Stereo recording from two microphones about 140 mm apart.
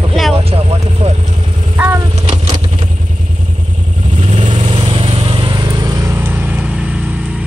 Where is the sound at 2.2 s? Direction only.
55° right (ahead or behind).